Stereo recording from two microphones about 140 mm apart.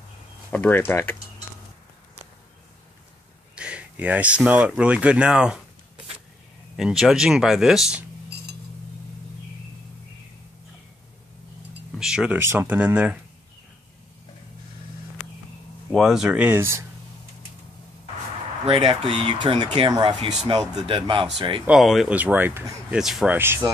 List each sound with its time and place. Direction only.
0.5 s speech: 15° left (ahead or behind)
3.5 s speech: 10° right (ahead or behind)
6.8 s speech: 5° right (ahead or behind)
12.0 s speech: 5° right (ahead or behind)
15.9 s speech: 5° right (ahead or behind); by 16.8 s 20° right (ahead or behind)
18.7 s speech: 40° right (ahead or behind)
21.6 s speech: centre (ahead or behind)
22.1 s speech: 15° right (ahead or behind)
23.3 s speech: 15° right (ahead or behind)